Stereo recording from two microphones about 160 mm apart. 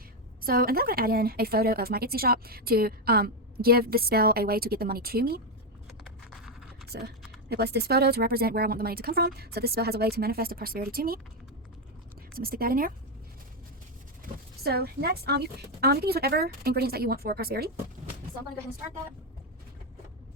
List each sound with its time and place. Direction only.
0.4 s a woman's voice: 70° right (ahead or behind)
5.9 s a sound: centre (ahead or behind)
6.8 s a woman's voice: 90° right; by 11.2 s 70° right (ahead or behind)
12.3 s a woman's voice: 70° right (ahead or behind)
14.6 s a woman's voice: 80° right